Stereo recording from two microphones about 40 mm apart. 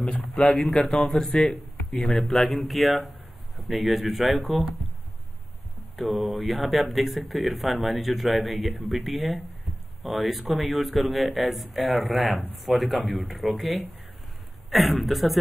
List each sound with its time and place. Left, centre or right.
0.0 s speech: left
0.4 s a man's voice: centre
5.9 s a man's voice: centre